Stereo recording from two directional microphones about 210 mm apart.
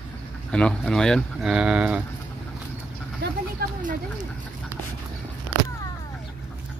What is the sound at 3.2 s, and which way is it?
Vehicle, 50° right (ahead or behind).